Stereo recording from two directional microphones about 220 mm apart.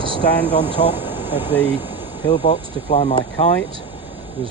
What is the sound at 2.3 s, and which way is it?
Speech, 25° left (ahead or behind).